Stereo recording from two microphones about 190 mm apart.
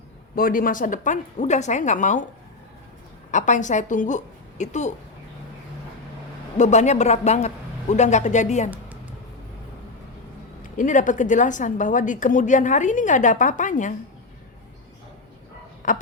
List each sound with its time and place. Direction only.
0.3 s a woman's voice: 50° left (ahead or behind)
3.3 s a woman's voice: 40° left (ahead or behind)
6.6 s a woman's voice: 40° left (ahead or behind)
10.6 s a woman's voice: 40° left (ahead or behind)
15.8 s speech: 40° left (ahead or behind)